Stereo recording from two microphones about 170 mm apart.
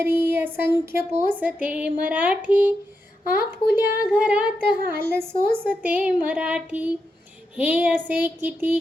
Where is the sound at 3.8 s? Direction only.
10° right (ahead or behind).